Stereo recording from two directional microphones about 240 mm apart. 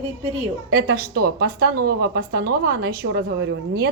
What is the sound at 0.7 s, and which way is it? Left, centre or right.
A woman's voice, right.